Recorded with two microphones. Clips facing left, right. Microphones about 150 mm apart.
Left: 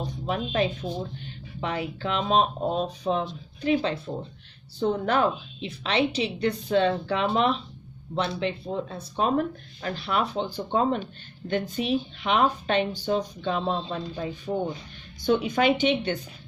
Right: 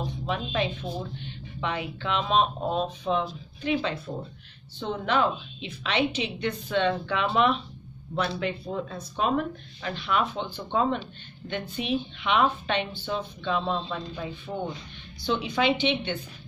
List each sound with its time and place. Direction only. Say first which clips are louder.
0.0 s speech: left 1 dB; 40° left (ahead or behind)
5.7 s speech: left 2 dB; 30° left (ahead or behind)